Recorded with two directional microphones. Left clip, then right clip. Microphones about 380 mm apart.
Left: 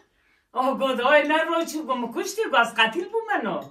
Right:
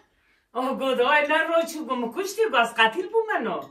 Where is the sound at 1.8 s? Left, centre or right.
Centre.